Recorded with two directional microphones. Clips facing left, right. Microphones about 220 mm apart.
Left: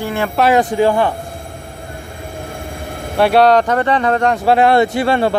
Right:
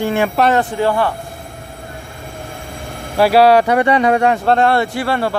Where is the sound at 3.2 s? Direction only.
5° right (ahead or behind).